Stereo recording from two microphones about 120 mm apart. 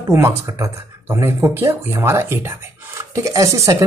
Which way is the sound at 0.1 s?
25° right (ahead or behind).